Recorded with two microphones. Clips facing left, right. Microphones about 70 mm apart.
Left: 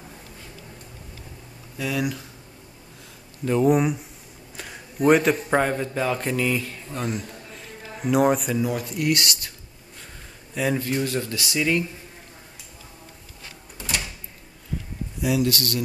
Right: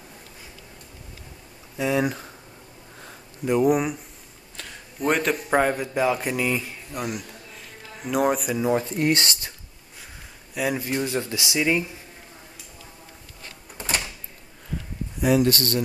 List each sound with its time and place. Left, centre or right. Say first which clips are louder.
1.8 s speech: right 3 dB; right
3.4 s a man's voice: left 1 dB; centre
8.5 s speech: right 3 dB; right
10.5 s speech: left 1 dB; centre
10.8 s speech: left 1 dB; centre
13.7 s door: right 2 dB; right
15.2 s speech: right 3 dB; right